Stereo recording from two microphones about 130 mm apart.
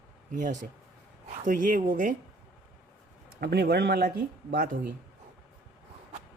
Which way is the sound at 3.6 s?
90° right.